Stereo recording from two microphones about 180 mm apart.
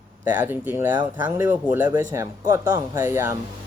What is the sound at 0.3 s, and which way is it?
Speech, 10° right (ahead or behind).